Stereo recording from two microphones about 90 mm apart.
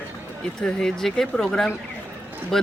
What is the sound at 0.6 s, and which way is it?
Speech, 5° left (ahead or behind).